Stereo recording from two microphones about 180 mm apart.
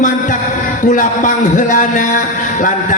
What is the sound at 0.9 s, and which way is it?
A man's voice, 45° left (ahead or behind).